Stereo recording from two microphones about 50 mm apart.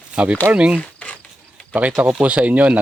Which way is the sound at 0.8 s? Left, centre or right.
Left.